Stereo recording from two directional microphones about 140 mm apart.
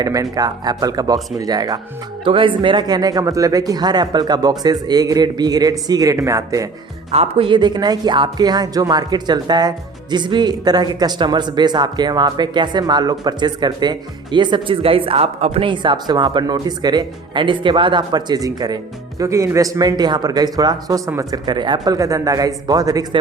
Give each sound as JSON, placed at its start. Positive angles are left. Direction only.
{"t": 0.0, "sound": "a man's voice", "side_deg": -25}
{"t": 7.1, "sound": "a man's voice", "side_deg": -45}